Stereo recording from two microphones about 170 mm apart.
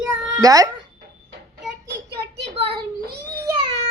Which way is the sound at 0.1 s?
15° right (ahead or behind).